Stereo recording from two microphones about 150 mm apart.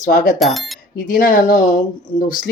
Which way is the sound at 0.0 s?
60° left (ahead or behind).